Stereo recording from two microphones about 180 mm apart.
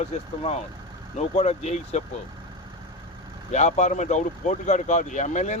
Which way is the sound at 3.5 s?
40° left (ahead or behind).